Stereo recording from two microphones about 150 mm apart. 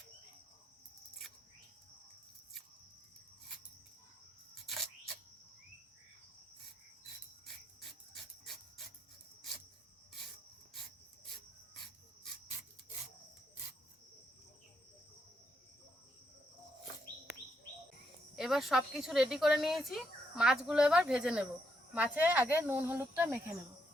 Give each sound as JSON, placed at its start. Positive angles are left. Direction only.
{"t": 4.6, "sound": "camera", "side_deg": 0}
{"t": 7.4, "sound": "a sound", "side_deg": 0}
{"t": 18.3, "sound": "speech", "side_deg": 0}